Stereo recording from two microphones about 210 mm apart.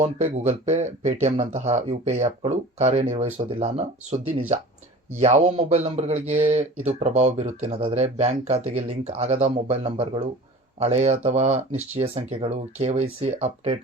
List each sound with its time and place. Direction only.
0.0 s speech: 35° right (ahead or behind)